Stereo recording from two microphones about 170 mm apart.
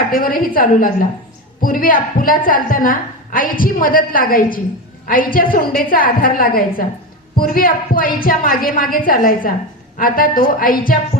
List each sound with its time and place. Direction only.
0.1 s a woman's voice: 55° left (ahead or behind)